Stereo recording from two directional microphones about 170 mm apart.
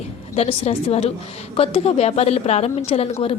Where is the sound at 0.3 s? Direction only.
35° left (ahead or behind).